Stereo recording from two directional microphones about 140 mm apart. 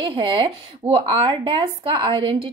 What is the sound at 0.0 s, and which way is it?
Speech, 35° right (ahead or behind).